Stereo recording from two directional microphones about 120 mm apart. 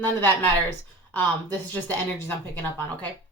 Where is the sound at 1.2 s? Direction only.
15° left (ahead or behind).